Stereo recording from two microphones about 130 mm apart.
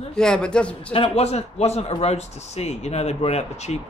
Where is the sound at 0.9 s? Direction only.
50° left (ahead or behind).